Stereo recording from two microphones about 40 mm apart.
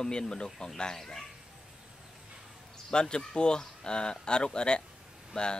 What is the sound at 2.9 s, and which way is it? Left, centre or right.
Speech, left.